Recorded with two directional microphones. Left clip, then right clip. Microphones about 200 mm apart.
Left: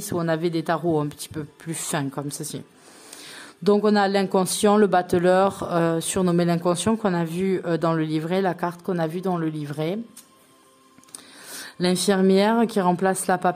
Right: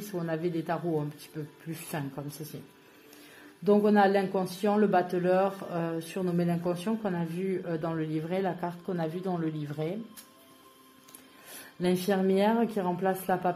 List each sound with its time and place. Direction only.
0.1 s speech: 40° left (ahead or behind)
3.6 s speech: 45° left (ahead or behind)
11.8 s speech: 40° left (ahead or behind)